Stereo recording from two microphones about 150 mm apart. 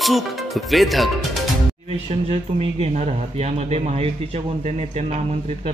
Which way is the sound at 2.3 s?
40° right (ahead or behind).